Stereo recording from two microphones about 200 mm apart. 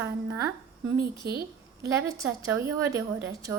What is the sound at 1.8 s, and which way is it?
A woman's voice, 15° right (ahead or behind).